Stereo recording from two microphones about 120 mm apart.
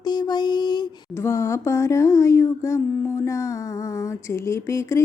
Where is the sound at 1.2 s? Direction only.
20° left (ahead or behind).